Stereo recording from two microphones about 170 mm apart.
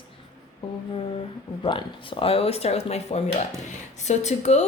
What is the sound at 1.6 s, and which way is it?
A woman's voice, 30° left (ahead or behind).